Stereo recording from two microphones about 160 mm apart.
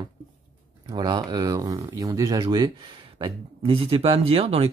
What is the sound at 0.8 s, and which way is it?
Speech, 25° right (ahead or behind).